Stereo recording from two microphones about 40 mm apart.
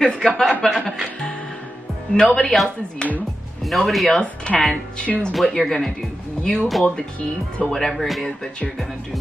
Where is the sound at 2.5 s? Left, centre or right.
Centre.